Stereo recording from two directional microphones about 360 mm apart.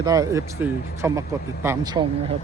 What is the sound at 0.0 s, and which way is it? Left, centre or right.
A man's voice, centre.